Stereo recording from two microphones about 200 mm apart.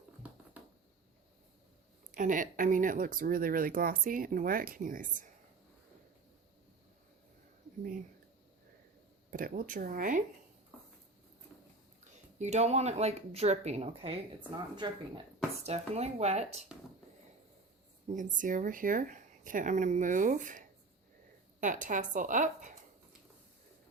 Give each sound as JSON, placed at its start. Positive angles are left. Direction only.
{"t": 0.2, "sound": "a sound", "side_deg": -10}
{"t": 2.1, "sound": "speech", "side_deg": -40}
{"t": 9.3, "sound": "speech", "side_deg": -45}
{"t": 10.7, "sound": "a sound", "side_deg": 5}
{"t": 12.4, "sound": "speech", "side_deg": -35}
{"t": 18.1, "sound": "speech", "side_deg": -40}